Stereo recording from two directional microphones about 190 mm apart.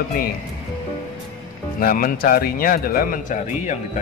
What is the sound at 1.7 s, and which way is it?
A man's voice, 50° left (ahead or behind).